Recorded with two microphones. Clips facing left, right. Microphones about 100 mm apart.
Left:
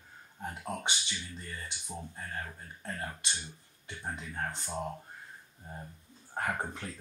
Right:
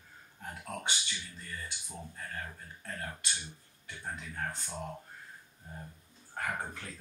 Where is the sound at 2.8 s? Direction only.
20° left (ahead or behind).